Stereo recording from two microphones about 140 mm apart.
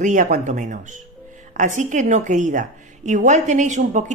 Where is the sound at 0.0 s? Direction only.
65° right (ahead or behind).